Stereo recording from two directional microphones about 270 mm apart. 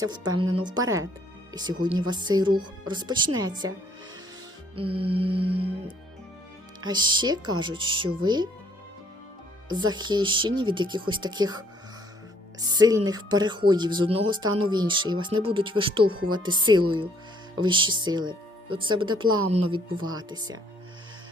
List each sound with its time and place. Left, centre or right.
0.0 s speech: centre
4.7 s music: centre
6.8 s speech: centre
9.6 s speech: centre
17.6 s speech: centre